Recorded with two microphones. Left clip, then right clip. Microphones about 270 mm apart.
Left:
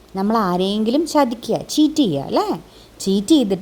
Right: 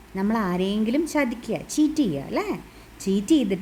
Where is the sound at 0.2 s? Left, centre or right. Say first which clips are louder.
Left 7 dB; centre.